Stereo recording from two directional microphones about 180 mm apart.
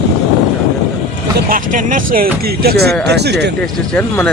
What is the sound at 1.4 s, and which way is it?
Speech, 50° right (ahead or behind).